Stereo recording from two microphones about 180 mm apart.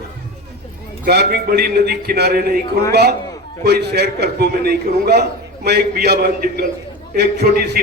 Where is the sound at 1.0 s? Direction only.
60° right (ahead or behind).